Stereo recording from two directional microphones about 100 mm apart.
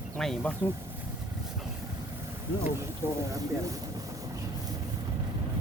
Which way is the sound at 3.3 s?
35° right (ahead or behind).